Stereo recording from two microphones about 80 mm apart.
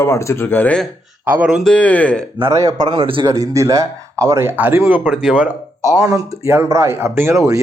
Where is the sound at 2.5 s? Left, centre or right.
Right.